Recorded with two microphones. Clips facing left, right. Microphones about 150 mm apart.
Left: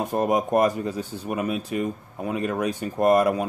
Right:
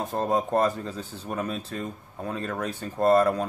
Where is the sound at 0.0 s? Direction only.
15° left (ahead or behind).